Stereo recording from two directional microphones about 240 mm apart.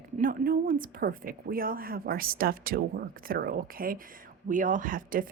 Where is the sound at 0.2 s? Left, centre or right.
Right.